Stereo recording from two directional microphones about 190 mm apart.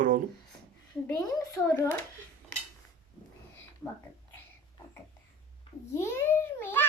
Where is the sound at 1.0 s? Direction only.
15° left (ahead or behind).